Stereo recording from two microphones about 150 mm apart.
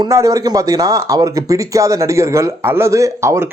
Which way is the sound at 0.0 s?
20° right (ahead or behind).